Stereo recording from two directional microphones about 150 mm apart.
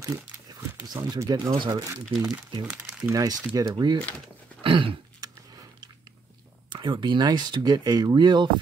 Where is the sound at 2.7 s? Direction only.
5° right (ahead or behind).